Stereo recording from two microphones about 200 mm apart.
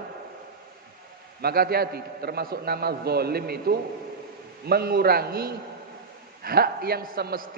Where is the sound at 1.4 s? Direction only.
50° right (ahead or behind).